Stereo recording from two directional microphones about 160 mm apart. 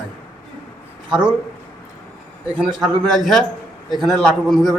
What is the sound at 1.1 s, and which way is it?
Speech, 5° right (ahead or behind).